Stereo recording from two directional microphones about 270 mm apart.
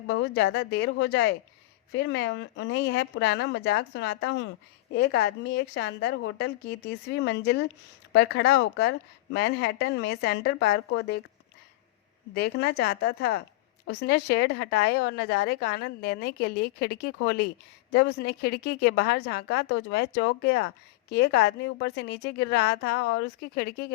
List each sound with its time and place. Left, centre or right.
0.1 s a woman's voice: left
12.3 s a woman's voice: left